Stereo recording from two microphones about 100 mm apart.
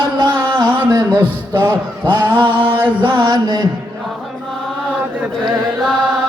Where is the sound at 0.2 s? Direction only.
45° right (ahead or behind).